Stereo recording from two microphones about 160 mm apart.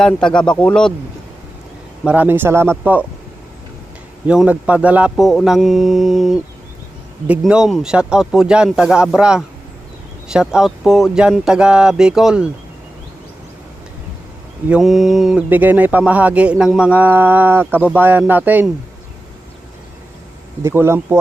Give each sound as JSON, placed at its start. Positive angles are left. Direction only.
{"t": 0.0, "sound": "speech", "side_deg": 5}
{"t": 2.0, "sound": "speech", "side_deg": -10}
{"t": 4.3, "sound": "speech", "side_deg": -5}
{"t": 14.7, "sound": "speech", "side_deg": 0}
{"t": 20.7, "sound": "speech", "side_deg": -15}